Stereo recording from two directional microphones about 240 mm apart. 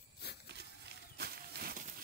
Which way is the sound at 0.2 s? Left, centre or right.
Left.